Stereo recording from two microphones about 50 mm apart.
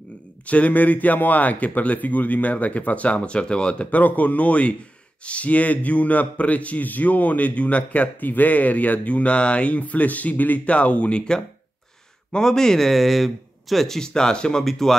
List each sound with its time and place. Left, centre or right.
0.5 s speech: left
3.9 s a man's voice: left; by 15.0 s centre